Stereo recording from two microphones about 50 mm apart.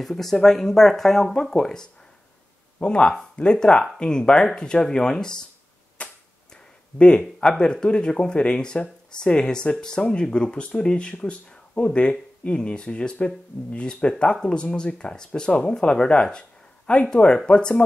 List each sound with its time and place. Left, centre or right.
0.0 s speech: centre
6.0 s a sound: left
6.5 s speech: centre